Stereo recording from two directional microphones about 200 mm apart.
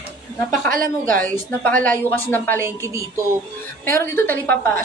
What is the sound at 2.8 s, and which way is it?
Music, 15° right (ahead or behind).